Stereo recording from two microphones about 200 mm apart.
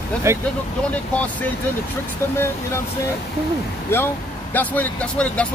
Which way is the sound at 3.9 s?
10° left (ahead or behind).